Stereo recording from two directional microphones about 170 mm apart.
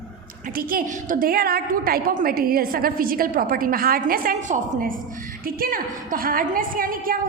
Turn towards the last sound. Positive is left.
turn(degrees=-55)  # may be behind; listen again after turning